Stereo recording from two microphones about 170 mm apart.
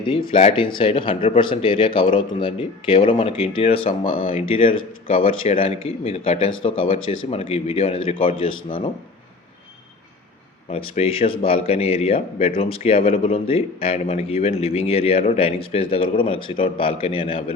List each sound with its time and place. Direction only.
0.0 s a man's voice: 30° left (ahead or behind)
10.7 s a man's voice: 35° left (ahead or behind)